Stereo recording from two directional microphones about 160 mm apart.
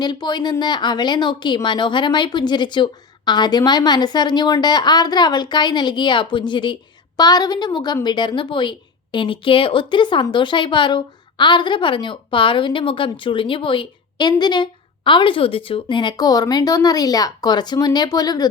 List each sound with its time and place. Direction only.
0.0 s speech: 25° left (ahead or behind)